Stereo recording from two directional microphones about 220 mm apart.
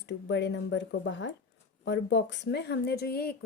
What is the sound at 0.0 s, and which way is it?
A woman's voice, 55° left (ahead or behind).